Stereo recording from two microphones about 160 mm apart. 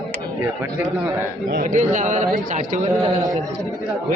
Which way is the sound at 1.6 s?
55° right (ahead or behind).